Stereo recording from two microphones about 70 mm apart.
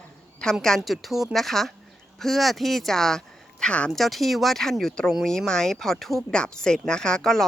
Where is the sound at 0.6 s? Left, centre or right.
Centre.